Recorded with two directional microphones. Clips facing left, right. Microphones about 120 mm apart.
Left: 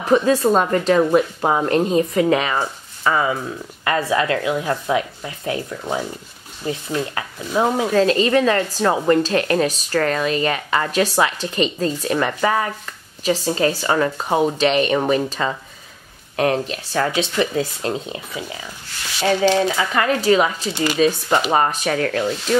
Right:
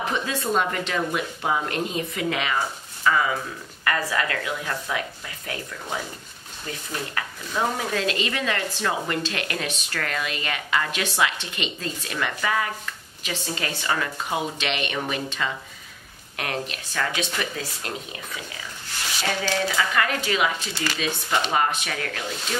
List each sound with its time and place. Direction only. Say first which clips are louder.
0.0 s a woman's voice: left 11 dB; 35° left (ahead or behind)
3.8 s speech: left 6 dB; 25° left (ahead or behind)
7.9 s a woman's voice: left 11 dB; 35° left (ahead or behind)
19.4 s speech: left 6 dB; 20° left (ahead or behind)
20.1 s a woman's voice: left 8 dB; 35° left (ahead or behind)
20.7 s speech: left 8 dB; 20° left (ahead or behind)
21.5 s a woman's voice: left 6 dB; 40° left (ahead or behind)